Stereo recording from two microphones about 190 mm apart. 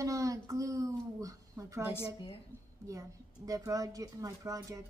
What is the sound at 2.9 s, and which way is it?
Speech, 15° right (ahead or behind).